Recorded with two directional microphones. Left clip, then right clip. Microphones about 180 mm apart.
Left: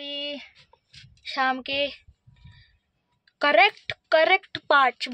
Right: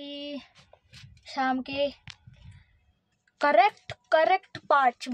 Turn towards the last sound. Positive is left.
turn(degrees=0)  # may be behind; listen again after turning